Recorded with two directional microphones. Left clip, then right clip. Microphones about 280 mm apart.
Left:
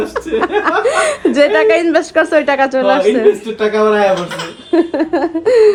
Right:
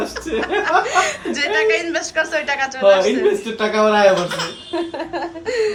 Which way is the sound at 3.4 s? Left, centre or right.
Centre.